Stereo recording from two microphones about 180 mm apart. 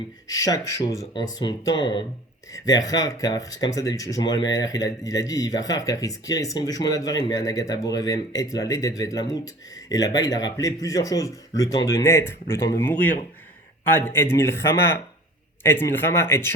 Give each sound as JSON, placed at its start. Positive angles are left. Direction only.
{"t": 0.3, "sound": "speech", "side_deg": 20}